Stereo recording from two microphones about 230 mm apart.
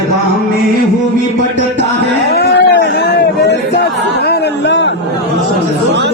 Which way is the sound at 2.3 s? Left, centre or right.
Left.